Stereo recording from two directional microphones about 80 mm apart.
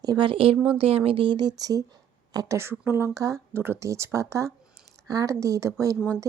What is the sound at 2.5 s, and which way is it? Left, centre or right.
A woman's voice, right.